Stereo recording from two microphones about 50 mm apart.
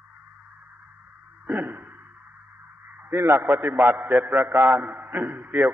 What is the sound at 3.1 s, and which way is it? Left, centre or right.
Speech, right.